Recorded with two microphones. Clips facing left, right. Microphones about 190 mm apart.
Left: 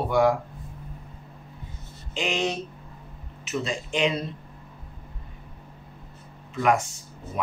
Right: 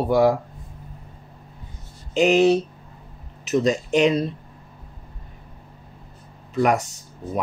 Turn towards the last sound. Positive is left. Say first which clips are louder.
# right 3 dB
turn(degrees=-40)  # may be behind; listen again after turning